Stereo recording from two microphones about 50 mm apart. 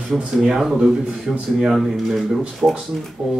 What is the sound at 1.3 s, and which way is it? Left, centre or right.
Speech, right.